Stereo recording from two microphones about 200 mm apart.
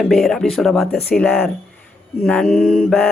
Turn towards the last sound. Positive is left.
turn(degrees=5)  # may be behind; listen again after turning